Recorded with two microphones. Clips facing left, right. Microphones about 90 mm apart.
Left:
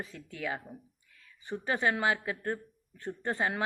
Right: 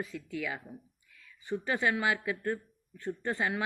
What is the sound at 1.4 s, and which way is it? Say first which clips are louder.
A man's voice: even; 25° left (ahead or behind).